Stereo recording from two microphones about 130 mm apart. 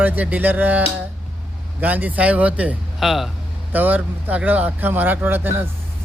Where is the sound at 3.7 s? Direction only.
15° right (ahead or behind).